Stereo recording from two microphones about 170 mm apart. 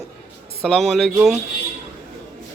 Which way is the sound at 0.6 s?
Centre (ahead or behind).